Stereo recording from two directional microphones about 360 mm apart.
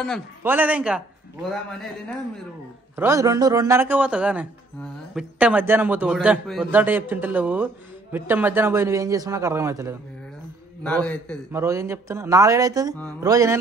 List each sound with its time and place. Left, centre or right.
0.0 s a man's voice: centre
10.8 s a man's voice: centre
11.6 s speech: centre